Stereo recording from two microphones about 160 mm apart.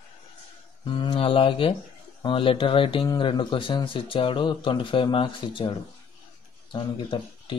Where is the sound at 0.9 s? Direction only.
35° left (ahead or behind).